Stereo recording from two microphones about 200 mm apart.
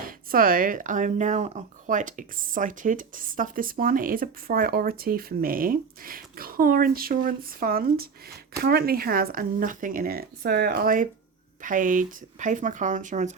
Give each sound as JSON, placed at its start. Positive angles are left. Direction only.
{"t": 0.1, "sound": "speech", "side_deg": -45}